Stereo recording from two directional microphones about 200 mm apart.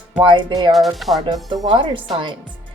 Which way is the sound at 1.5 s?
25° right (ahead or behind).